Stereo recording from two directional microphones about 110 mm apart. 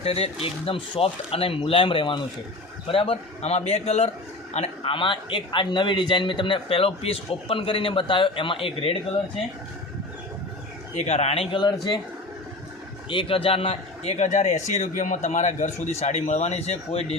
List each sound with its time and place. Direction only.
0.0 s a man's voice: 65° left (ahead or behind)
4.8 s a man's voice: 50° left (ahead or behind)
10.9 s speech: 90° left; by 11.4 s 70° left (ahead or behind)
11.5 s speech: 40° left (ahead or behind)
13.1 s a man's voice: 55° left (ahead or behind); by 17.2 s 80° left